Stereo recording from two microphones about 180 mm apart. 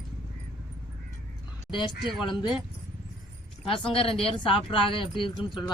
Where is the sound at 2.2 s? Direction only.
25° left (ahead or behind).